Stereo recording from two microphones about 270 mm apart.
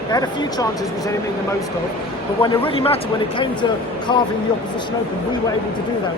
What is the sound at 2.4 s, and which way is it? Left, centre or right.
Speech, centre.